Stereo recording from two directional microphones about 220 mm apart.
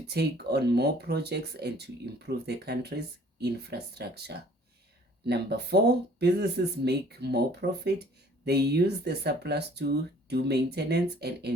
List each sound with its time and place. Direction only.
0.1 s speech: 45° right (ahead or behind)